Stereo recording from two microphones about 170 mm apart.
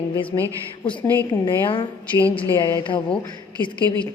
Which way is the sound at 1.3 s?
30° left (ahead or behind).